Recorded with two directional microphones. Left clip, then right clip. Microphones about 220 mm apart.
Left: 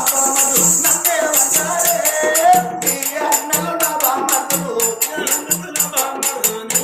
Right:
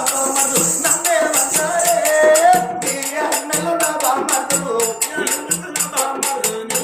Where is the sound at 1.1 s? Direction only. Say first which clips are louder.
Right 2 dB; 10° right (ahead or behind).